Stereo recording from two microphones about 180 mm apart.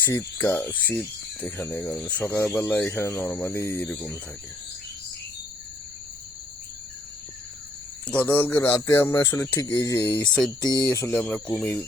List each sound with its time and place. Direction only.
0.0 s speech: 15° left (ahead or behind)
8.0 s speech: 10° left (ahead or behind)
11.2 s speech: 5° left (ahead or behind)